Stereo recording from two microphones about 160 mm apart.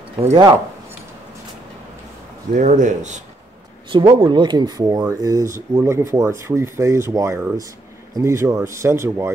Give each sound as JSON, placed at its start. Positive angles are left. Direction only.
{"t": 2.5, "sound": "a man's voice", "side_deg": -50}
{"t": 3.9, "sound": "speech", "side_deg": -30}